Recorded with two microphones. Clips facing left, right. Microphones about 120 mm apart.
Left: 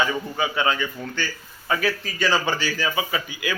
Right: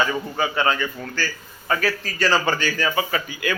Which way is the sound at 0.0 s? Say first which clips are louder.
Right 1 dB; 10° left (ahead or behind).